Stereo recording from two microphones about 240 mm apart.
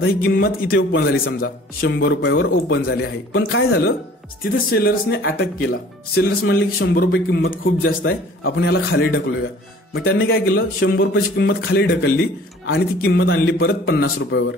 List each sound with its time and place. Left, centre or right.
0.0 s speech: left
0.7 s a man's voice: left
1.4 s speech: left
2.0 s speech: left
2.7 s speech: left
8.1 s a man's voice: left
10.0 s speech: left
10.5 s speech: left
11.4 s speech: left